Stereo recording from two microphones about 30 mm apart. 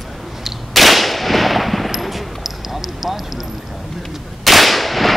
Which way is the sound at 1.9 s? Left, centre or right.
Centre.